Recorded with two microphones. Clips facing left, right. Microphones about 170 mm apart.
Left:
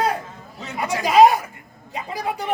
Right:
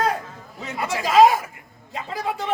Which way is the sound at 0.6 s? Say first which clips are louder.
Left 1 dB; centre (ahead or behind).